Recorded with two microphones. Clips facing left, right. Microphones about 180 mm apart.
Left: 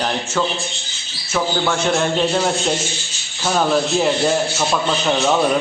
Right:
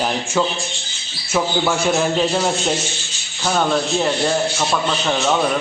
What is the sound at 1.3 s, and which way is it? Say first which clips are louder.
A man's voice: right 1 dB; 10° right (ahead or behind).